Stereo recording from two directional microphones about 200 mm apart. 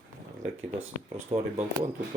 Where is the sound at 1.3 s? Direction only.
30° right (ahead or behind).